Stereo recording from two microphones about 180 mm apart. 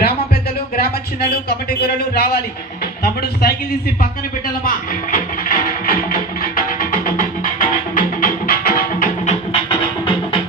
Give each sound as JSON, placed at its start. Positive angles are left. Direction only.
{"t": 0.0, "sound": "music", "side_deg": 55}
{"t": 1.3, "sound": "speech", "side_deg": 60}
{"t": 4.6, "sound": "music", "side_deg": 50}
{"t": 9.7, "sound": "music", "side_deg": 30}